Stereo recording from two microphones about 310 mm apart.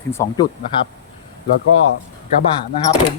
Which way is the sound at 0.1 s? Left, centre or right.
Centre.